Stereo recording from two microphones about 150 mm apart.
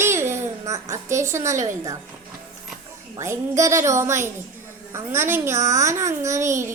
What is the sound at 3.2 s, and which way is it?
A child's voice, 20° right (ahead or behind).